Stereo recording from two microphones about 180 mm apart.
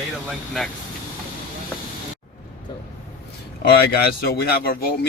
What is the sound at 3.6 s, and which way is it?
Speech, 60° left (ahead or behind).